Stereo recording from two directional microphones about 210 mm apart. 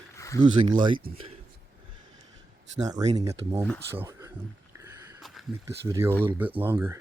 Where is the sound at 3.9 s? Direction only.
10° right (ahead or behind).